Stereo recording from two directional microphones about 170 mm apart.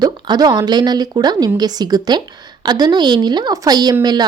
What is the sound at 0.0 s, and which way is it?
Speech, 25° right (ahead or behind).